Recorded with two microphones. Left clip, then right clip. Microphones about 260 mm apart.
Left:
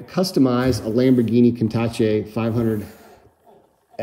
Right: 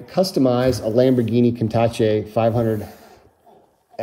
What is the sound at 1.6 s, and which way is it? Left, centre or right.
Speech, left.